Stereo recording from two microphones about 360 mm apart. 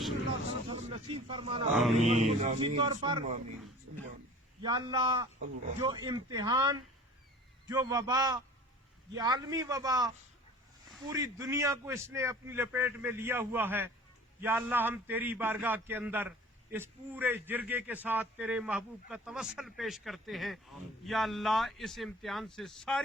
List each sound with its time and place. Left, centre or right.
0.7 s speech: centre
1.7 s a man's voice: centre
2.0 s a man's voice: centre
4.6 s a man's voice: centre
11.1 s a man's voice: centre